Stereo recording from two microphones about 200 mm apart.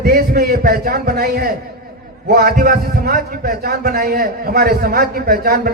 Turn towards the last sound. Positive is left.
turn(degrees=-50)  # may be behind; listen again after turning